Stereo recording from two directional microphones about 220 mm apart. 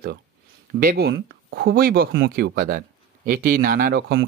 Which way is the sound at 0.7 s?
45° right (ahead or behind).